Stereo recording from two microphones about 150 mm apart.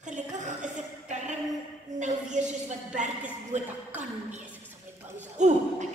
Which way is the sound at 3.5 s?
50° right (ahead or behind).